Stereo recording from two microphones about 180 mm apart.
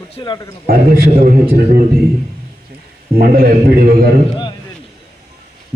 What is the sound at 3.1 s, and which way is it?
A man's voice, 55° right (ahead or behind).